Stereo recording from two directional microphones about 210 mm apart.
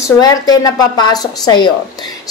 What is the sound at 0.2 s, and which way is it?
A woman's voice, 20° left (ahead or behind).